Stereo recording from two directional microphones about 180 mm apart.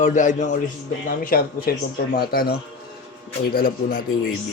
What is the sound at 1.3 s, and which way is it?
Speech, 55° left (ahead or behind).